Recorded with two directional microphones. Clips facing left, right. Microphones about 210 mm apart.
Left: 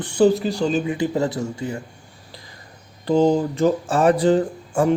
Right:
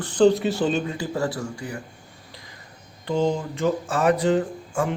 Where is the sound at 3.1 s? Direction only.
35° left (ahead or behind).